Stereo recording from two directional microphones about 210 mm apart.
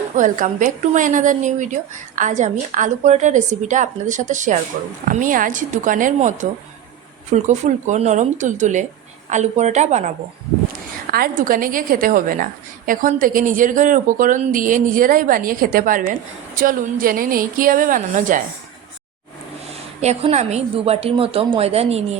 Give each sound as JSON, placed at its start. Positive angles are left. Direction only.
{"t": 0.2, "sound": "a woman's voice", "side_deg": -40}
{"t": 11.1, "sound": "a woman's voice", "side_deg": -45}
{"t": 20.0, "sound": "a woman's voice", "side_deg": -30}